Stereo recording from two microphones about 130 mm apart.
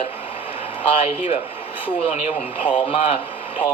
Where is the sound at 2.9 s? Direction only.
45° left (ahead or behind).